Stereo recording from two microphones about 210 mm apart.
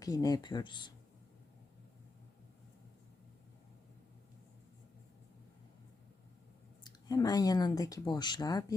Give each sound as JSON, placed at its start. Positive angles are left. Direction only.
{"t": 0.0, "sound": "speech", "side_deg": 15}
{"t": 6.8, "sound": "speech", "side_deg": 20}